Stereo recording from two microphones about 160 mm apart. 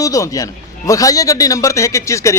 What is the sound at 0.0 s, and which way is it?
A man's voice, 20° left (ahead or behind).